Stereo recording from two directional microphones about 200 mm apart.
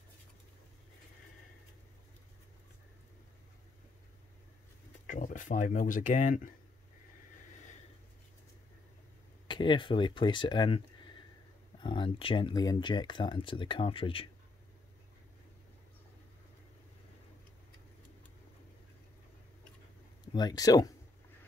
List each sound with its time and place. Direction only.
5.0 s speech: 40° left (ahead or behind)
9.5 s speech: 25° left (ahead or behind)
11.8 s speech: 25° left (ahead or behind)
20.3 s speech: 20° left (ahead or behind)